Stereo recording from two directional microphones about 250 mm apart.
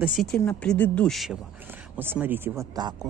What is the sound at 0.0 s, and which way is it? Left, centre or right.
Speech, centre.